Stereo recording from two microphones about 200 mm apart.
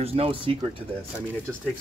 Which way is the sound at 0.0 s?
30° right (ahead or behind).